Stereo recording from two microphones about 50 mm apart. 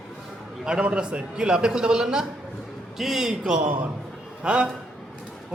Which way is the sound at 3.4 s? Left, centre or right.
Centre.